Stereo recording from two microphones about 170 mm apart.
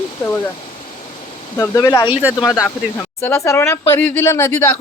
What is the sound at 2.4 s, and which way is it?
Speech, 15° left (ahead or behind).